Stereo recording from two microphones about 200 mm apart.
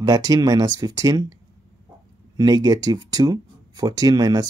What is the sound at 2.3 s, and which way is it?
Speech, 20° right (ahead or behind).